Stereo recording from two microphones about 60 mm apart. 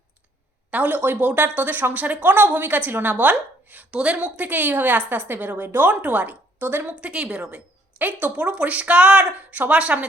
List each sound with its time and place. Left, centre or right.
0.7 s a woman's voice: right
7.0 s a woman's voice: centre